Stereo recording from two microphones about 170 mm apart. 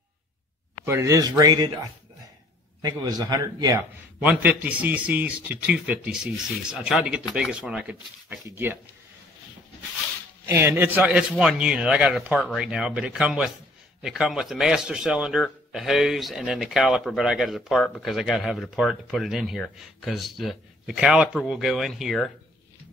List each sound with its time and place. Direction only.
0.8 s a man's voice: 15° right (ahead or behind)
10.4 s a man's voice: 15° right (ahead or behind)